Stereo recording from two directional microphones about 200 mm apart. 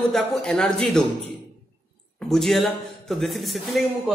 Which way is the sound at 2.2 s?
Centre (ahead or behind).